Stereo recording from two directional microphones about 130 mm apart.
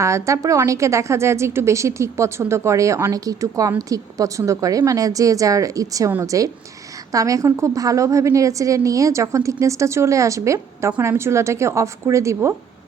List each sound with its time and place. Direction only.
0.0 s a woman's voice: 25° right (ahead or behind)